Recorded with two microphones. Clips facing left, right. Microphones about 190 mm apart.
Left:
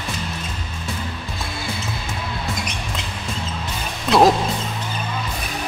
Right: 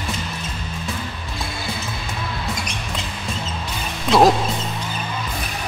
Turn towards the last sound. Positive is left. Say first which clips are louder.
# even
turn(degrees=0)  # may be behind; listen again after turning